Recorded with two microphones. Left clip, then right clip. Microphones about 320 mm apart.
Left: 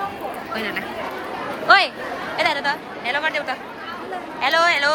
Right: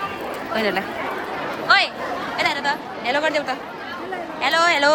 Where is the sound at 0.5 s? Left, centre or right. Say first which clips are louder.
Right 6 dB; centre.